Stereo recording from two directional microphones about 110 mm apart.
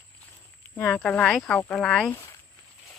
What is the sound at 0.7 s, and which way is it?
Speech, 15° left (ahead or behind).